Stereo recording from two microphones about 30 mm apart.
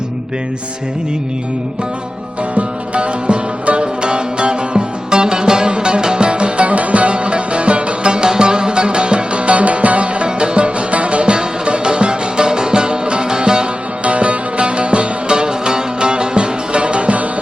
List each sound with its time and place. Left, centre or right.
2.6 s music: right
6.7 s music: right
10.2 s music: right
14.0 s music: right